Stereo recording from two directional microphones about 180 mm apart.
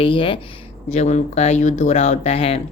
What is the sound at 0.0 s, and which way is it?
Speech, 30° left (ahead or behind).